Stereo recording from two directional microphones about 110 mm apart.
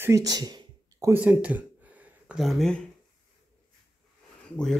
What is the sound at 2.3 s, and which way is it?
Speech, centre (ahead or behind).